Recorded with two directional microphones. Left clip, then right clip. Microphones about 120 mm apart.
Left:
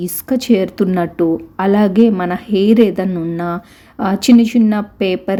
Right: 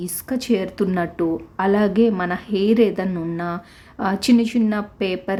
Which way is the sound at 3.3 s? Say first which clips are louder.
Left 5 dB; 25° left (ahead or behind).